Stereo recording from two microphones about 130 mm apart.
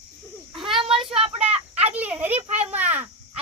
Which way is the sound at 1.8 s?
10° right (ahead or behind).